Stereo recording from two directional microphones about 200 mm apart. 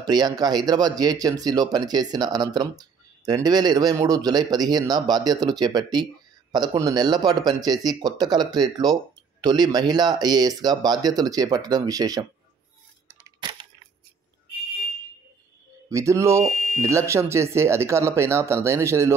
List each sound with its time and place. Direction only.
0.0 s speech: 20° right (ahead or behind)
13.2 s a sound: 20° right (ahead or behind)
15.9 s speech: 15° right (ahead or behind)